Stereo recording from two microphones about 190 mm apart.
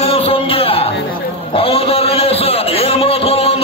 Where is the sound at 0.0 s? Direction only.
30° left (ahead or behind).